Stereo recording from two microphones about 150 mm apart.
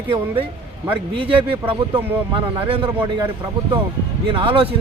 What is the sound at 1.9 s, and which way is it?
Speech, 35° right (ahead or behind).